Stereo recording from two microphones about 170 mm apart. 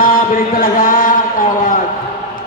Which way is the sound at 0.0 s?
55° left (ahead or behind).